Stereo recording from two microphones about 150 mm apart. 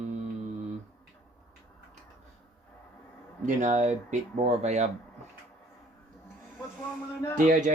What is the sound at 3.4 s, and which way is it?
Speech, 55° right (ahead or behind).